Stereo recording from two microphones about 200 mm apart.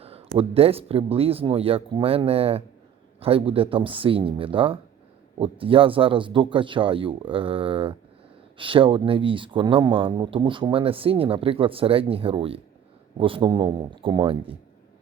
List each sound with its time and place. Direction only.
0.3 s speech: 30° right (ahead or behind)